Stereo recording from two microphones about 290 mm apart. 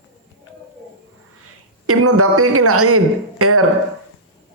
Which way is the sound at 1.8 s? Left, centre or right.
Right.